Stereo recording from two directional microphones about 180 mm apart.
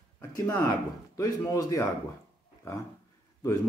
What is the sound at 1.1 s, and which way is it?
Speech, 20° left (ahead or behind).